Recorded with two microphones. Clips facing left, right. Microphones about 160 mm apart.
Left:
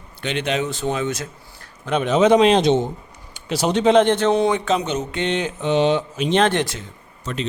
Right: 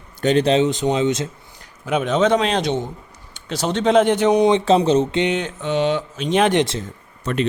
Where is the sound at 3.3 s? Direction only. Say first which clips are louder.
Left 2 dB; 10° left (ahead or behind).